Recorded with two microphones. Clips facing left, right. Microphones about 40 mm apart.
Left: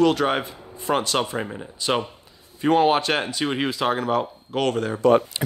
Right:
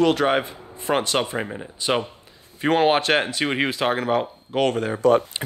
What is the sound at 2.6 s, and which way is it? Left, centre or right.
Speech, right.